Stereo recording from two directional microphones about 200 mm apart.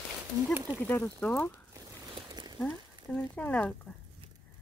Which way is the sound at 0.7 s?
5° left (ahead or behind).